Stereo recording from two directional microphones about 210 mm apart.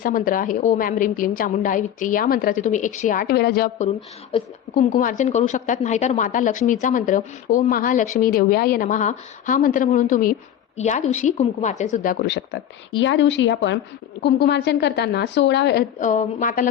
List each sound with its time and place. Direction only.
0.0 s a woman's voice: 40° left (ahead or behind)
4.7 s a woman's voice: 40° left (ahead or behind)
12.2 s a woman's voice: 55° left (ahead or behind)
16.0 s a woman's voice: 35° left (ahead or behind)